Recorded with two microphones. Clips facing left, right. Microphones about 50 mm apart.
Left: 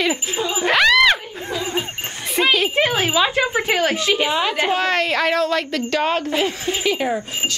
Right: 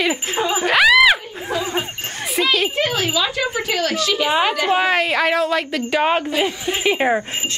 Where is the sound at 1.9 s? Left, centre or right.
Centre.